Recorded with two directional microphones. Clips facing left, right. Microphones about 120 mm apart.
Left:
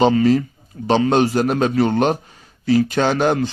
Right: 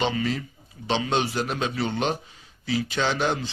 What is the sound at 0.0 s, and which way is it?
A man's voice, 40° left (ahead or behind).